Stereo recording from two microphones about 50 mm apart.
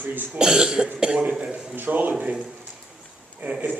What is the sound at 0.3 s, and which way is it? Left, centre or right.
Cough, centre.